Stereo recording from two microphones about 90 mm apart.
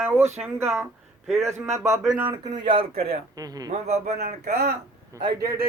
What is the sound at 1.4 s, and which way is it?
Speech, 30° right (ahead or behind).